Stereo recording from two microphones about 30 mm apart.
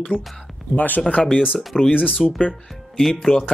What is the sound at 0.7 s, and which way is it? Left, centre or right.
Speech, left.